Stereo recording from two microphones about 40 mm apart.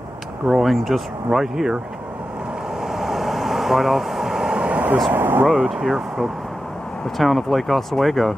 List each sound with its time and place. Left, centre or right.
0.5 s speech: centre
2.8 s air conditioning: centre
4.6 s vehicle: right
5.1 s speech: right
5.5 s speech: centre